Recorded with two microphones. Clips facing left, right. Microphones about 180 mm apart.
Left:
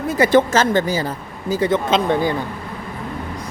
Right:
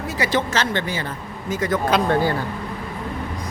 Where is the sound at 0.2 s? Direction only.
50° left (ahead or behind).